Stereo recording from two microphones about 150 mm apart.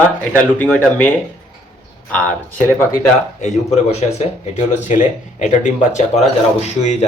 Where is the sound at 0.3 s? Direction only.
5° left (ahead or behind).